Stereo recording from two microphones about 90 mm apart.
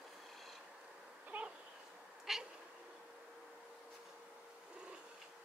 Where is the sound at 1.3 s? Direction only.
15° right (ahead or behind).